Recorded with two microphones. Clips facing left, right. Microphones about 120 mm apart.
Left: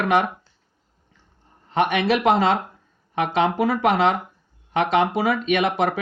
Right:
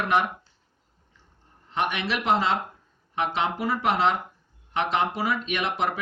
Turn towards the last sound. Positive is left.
turn(degrees=65)  # may be behind; listen again after turning